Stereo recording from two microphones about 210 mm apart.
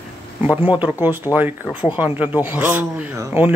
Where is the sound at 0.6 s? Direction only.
5° right (ahead or behind).